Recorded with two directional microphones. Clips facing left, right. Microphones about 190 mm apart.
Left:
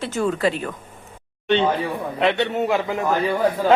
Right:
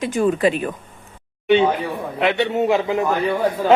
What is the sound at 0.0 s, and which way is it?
A man's voice, 15° right (ahead or behind).